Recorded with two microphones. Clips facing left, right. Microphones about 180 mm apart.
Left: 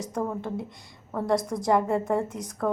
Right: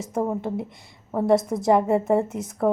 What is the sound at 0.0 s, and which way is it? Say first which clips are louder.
A woman's voice: right 4 dB; 25° right (ahead or behind).